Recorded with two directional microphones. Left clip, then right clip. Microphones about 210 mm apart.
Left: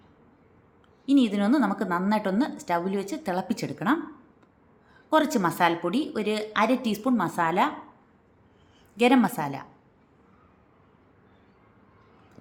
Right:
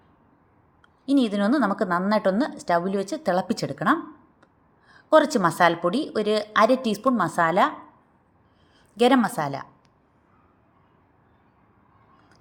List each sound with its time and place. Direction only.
1.0 s a woman's voice: 25° right (ahead or behind)
9.0 s a woman's voice: 25° right (ahead or behind)